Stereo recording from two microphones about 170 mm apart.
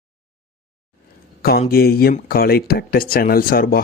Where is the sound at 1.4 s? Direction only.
65° left (ahead or behind).